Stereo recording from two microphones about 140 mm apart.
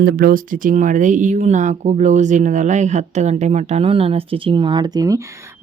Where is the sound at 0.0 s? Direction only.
90° right.